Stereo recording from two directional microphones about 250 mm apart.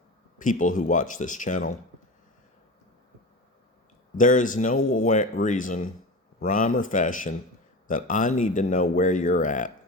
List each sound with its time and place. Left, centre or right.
0.3 s speech: left
4.2 s speech: left